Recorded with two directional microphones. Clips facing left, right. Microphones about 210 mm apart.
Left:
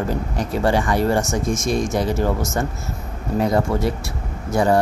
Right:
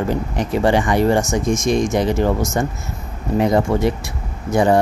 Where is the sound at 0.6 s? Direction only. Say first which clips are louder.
Right 3 dB; 15° right (ahead or behind).